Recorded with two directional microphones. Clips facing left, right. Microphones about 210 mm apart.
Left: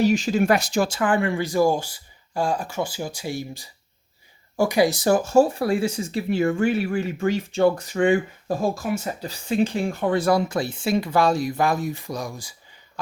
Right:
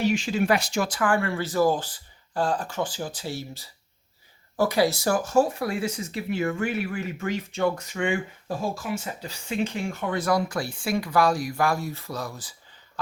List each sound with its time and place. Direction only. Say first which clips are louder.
0.0 s speech: left 4 dB; 40° left (ahead or behind)
0.8 s speech: left 3 dB; 25° left (ahead or behind)